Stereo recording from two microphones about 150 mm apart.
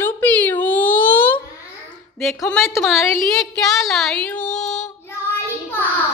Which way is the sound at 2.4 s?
15° left (ahead or behind).